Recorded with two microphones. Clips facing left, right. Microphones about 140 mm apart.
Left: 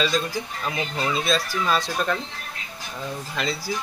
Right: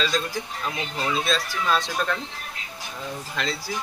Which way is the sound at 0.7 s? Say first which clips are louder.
Left 2 dB; 5° left (ahead or behind).